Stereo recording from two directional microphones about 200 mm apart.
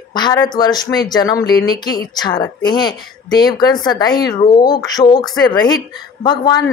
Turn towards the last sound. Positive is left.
turn(degrees=20)  # may be behind; listen again after turning